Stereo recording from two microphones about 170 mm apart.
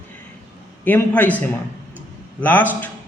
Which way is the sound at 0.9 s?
10° left (ahead or behind).